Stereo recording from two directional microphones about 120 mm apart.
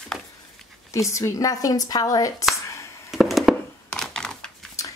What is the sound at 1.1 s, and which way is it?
A woman's voice, 25° left (ahead or behind).